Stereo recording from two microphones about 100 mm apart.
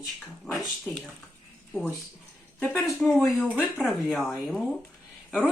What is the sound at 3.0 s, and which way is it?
Speech, 10° left (ahead or behind).